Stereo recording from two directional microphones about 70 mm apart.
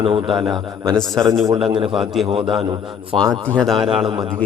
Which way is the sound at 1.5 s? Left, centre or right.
Centre.